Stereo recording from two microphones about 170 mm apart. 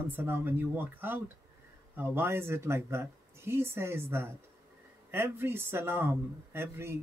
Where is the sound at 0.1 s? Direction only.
15° right (ahead or behind).